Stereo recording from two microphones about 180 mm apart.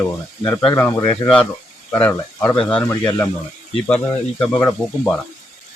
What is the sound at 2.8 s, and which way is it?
Speech, 20° left (ahead or behind).